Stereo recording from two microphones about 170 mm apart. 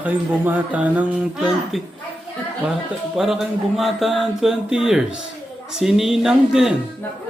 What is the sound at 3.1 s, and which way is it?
Speech, centre (ahead or behind).